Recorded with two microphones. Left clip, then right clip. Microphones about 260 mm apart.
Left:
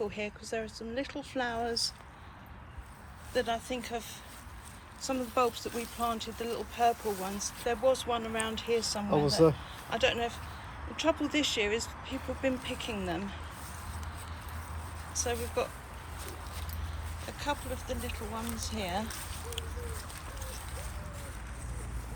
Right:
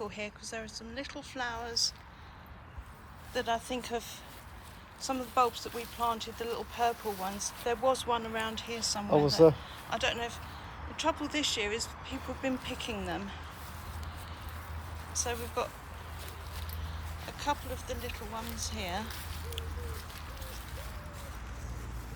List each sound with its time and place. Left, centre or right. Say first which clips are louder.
0.0 s speech: left 3 dB; centre
3.3 s speech: left 1 dB; centre
5.0 s speech: right 1 dB; centre
9.0 s speech: right 3 dB; right
9.9 s speech: left 3 dB; centre
15.2 s speech: left 2 dB; centre
17.4 s speech: right 1 dB; centre